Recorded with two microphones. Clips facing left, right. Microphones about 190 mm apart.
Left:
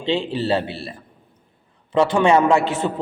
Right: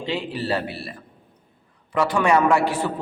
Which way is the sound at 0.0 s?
25° left (ahead or behind).